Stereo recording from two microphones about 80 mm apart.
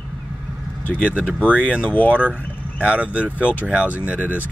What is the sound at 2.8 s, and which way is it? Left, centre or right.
Speech, centre.